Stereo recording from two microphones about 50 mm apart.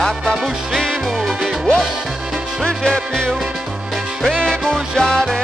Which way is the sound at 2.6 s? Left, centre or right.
Centre.